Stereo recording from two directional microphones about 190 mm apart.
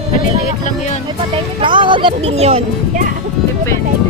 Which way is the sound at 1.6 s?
25° right (ahead or behind).